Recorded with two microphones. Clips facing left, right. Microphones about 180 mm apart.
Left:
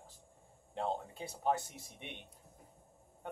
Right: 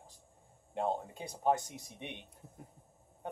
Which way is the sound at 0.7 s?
15° right (ahead or behind).